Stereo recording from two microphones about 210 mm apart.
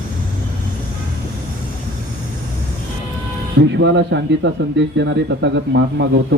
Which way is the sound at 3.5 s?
60° right (ahead or behind).